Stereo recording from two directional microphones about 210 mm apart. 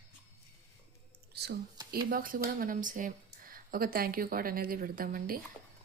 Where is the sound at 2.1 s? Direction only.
45° right (ahead or behind).